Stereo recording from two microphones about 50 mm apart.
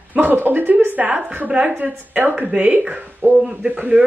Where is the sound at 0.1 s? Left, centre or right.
Right.